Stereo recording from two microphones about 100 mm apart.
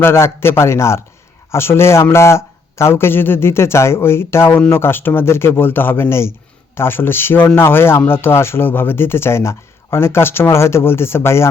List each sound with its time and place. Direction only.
0.0 s speech: 25° left (ahead or behind)